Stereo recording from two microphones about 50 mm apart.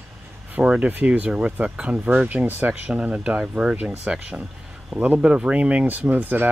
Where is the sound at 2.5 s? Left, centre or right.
Right.